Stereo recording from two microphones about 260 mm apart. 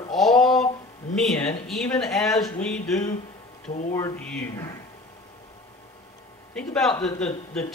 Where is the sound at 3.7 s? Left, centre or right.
Left.